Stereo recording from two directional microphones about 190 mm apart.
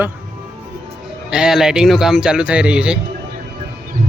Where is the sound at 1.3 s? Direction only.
5° right (ahead or behind).